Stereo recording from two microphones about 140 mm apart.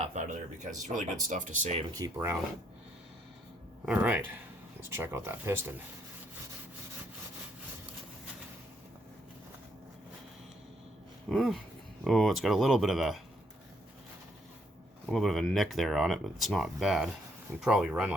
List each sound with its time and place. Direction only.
0.0 s speech: 55° right (ahead or behind)
1.9 s speech: 25° right (ahead or behind)
3.8 s speech: 10° right (ahead or behind)
11.3 s speech: centre (ahead or behind)
15.1 s speech: centre (ahead or behind)